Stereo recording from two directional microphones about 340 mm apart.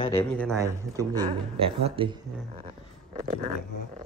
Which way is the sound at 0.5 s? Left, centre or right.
Centre.